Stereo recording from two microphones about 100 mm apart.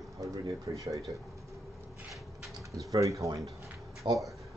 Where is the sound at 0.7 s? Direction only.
35° right (ahead or behind).